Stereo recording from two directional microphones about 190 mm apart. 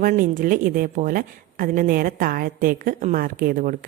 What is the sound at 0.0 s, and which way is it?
Speech, 45° right (ahead or behind).